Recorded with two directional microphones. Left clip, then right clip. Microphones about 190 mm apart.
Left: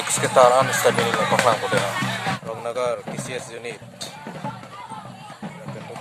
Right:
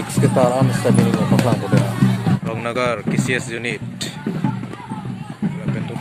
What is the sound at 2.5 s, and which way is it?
Speech, 5° left (ahead or behind).